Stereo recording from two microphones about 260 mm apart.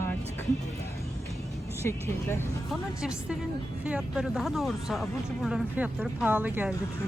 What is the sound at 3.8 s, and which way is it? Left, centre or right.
Speech, centre.